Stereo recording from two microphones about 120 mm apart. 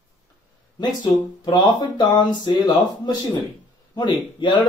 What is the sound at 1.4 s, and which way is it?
A man's voice, 40° left (ahead or behind).